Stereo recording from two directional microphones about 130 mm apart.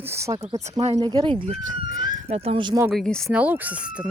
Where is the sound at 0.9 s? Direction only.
30° right (ahead or behind).